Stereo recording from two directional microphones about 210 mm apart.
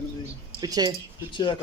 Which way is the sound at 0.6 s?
20° right (ahead or behind).